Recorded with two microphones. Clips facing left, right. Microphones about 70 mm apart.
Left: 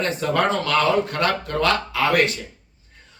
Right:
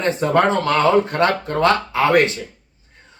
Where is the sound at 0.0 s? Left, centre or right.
Right.